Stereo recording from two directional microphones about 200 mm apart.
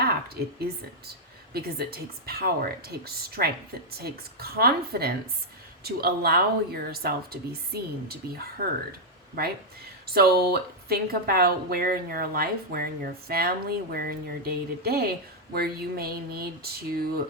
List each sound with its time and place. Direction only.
1.5 s speech: 50° right (ahead or behind)